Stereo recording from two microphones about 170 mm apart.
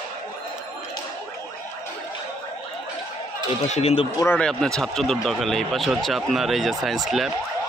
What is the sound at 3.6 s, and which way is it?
Speech, 40° left (ahead or behind).